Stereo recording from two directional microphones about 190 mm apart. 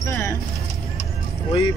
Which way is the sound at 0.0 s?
15° left (ahead or behind).